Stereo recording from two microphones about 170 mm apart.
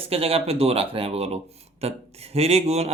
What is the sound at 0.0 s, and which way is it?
Speech, 35° right (ahead or behind).